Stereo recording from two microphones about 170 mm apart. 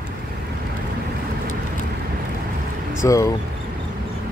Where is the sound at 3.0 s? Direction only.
20° left (ahead or behind).